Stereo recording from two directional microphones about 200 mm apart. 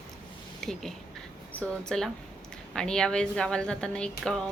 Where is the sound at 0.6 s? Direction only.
Centre (ahead or behind).